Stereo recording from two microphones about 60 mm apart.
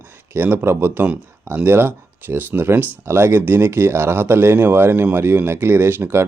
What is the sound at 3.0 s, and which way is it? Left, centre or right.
Speech, right.